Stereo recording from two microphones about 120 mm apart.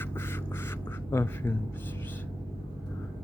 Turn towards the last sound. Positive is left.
turn(degrees=20)  # may be behind; listen again after turning